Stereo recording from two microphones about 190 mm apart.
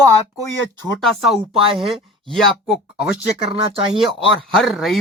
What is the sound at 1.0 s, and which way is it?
Speech, centre (ahead or behind).